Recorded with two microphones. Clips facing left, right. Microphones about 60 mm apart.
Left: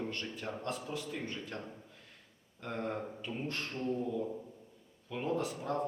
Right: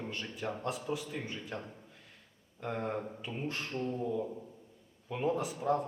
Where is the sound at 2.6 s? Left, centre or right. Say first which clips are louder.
Right 2 dB; centre.